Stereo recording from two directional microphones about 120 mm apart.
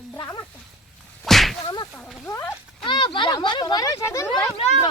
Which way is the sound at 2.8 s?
40° left (ahead or behind).